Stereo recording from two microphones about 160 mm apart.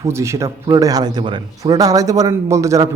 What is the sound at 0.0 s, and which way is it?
A man's voice, 20° right (ahead or behind).